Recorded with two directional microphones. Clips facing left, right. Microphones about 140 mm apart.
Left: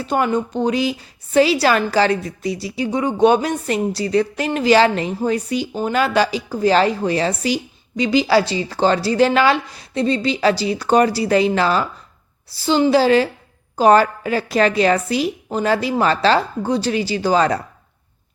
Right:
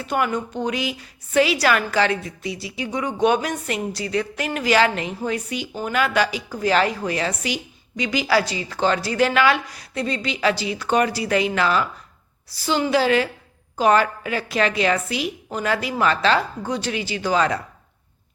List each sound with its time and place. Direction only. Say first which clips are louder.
0.0 s a woman's voice: left 4 dB; 30° left (ahead or behind)